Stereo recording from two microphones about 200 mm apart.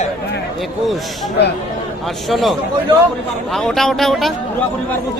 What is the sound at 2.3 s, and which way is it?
Speech, centre (ahead or behind).